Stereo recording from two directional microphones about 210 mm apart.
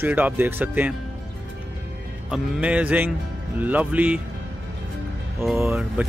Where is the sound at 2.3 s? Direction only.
5° right (ahead or behind).